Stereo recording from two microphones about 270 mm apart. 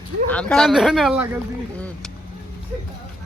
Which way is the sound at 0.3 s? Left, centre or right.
Centre.